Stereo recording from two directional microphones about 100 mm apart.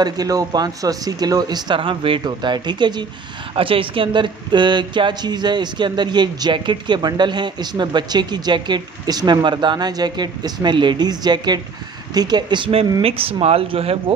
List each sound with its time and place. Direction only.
0.0 s speech: 40° right (ahead or behind)
1.8 s speech: 60° right (ahead or behind)
3.5 s speech: 65° right (ahead or behind)
13.0 s speech: 70° right (ahead or behind)